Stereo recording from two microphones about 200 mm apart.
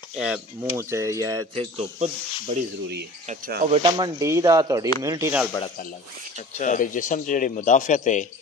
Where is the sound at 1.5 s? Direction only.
35° right (ahead or behind).